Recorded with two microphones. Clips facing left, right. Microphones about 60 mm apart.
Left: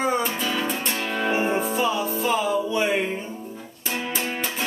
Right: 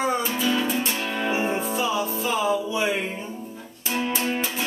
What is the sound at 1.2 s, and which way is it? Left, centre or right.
Music, centre.